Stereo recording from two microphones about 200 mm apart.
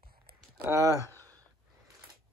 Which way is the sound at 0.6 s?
15° right (ahead or behind).